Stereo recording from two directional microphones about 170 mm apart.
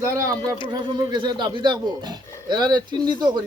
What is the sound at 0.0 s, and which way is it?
Music, 20° right (ahead or behind).